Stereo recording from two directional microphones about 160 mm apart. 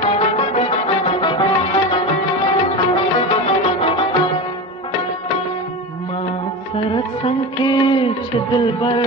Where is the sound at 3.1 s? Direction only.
35° left (ahead or behind).